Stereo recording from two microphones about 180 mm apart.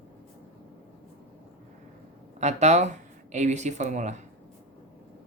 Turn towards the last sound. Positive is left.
turn(degrees=-40)  # may be behind; listen again after turning